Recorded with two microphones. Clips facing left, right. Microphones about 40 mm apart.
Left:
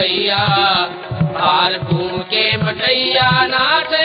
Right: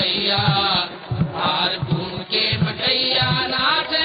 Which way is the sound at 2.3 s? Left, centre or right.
Left.